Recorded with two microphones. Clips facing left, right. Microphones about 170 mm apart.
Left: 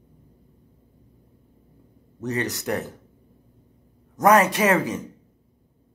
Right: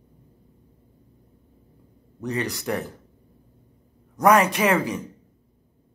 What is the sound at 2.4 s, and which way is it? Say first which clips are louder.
Music: left 1 dB; 20° left (ahead or behind).